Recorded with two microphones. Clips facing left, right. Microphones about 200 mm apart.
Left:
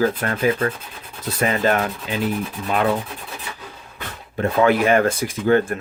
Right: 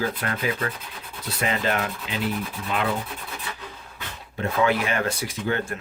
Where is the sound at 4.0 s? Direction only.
50° left (ahead or behind).